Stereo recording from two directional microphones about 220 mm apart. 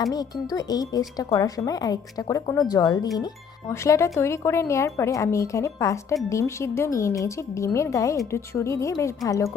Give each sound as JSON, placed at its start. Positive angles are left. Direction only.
{"t": 0.0, "sound": "speech", "side_deg": 15}